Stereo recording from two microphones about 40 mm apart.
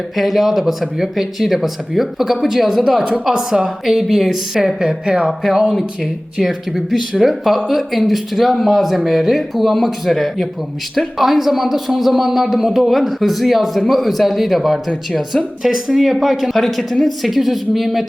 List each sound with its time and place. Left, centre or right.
0.2 s a woman's voice: centre
7.2 s speech: centre